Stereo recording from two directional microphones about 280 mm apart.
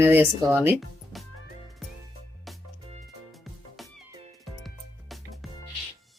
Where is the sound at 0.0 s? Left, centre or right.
Centre.